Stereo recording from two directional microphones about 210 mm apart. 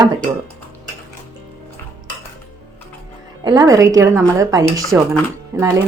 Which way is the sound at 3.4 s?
15° right (ahead or behind).